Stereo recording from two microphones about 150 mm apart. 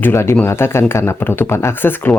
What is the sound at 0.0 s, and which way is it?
Speech, 15° left (ahead or behind).